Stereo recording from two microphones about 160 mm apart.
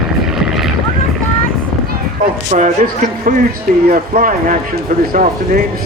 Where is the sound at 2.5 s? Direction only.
50° right (ahead or behind).